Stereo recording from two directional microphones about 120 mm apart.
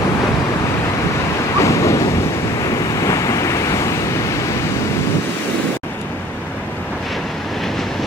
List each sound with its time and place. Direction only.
1.6 s waves: 25° left (ahead or behind)